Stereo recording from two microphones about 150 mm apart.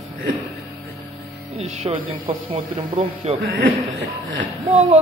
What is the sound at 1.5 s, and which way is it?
A man's voice, 45° right (ahead or behind).